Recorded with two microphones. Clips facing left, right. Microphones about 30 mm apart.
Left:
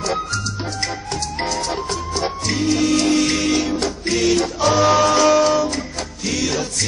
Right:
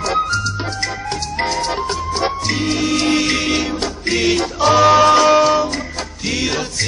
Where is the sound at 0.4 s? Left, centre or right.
Centre.